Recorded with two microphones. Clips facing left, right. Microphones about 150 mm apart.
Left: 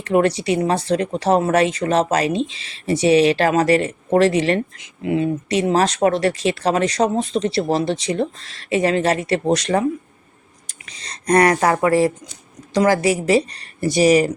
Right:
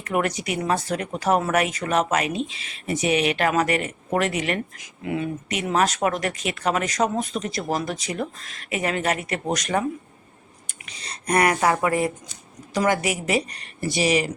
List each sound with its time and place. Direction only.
0.0 s speech: 30° left (ahead or behind)